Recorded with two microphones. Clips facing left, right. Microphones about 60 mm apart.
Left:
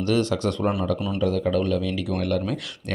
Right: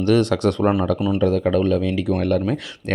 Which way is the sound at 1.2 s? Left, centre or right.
Right.